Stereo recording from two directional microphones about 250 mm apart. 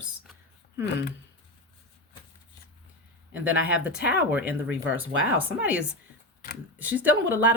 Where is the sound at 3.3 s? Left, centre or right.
Centre.